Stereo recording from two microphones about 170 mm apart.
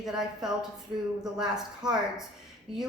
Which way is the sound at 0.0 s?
5° right (ahead or behind).